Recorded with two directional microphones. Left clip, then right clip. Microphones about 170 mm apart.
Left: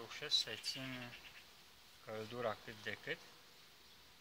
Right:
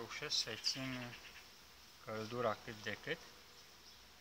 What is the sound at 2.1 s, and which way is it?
Speech, 20° left (ahead or behind).